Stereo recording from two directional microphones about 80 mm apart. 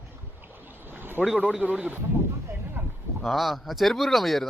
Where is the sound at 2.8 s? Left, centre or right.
Right.